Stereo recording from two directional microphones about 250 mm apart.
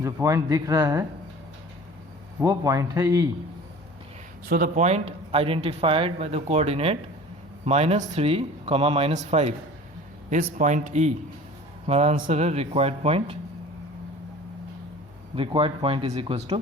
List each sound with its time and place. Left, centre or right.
0.0 s a man's voice: centre
2.4 s a man's voice: centre
4.4 s speech: right
15.4 s speech: right